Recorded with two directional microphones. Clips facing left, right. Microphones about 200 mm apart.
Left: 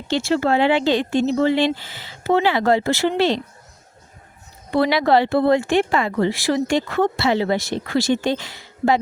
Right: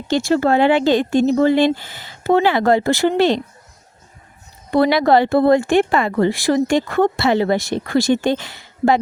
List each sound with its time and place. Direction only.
0.3 s speech: 45° right (ahead or behind)
4.7 s speech: 45° right (ahead or behind)